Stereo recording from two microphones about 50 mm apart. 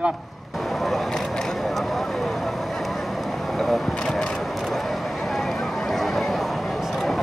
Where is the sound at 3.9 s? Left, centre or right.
Centre.